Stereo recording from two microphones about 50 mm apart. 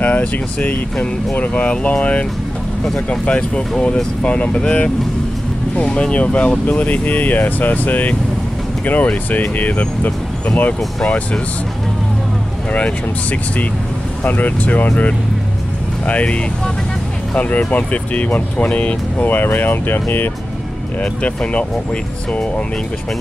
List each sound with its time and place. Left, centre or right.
0.0 s speech: left
12.7 s speech: left
16.1 s speech: left
17.4 s speech: left
19.2 s speech: left
21.0 s speech: left